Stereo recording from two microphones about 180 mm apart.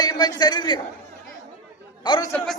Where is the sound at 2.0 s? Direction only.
25° left (ahead or behind).